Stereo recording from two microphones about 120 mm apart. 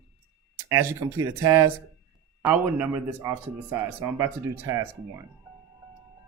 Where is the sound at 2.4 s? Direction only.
15° right (ahead or behind).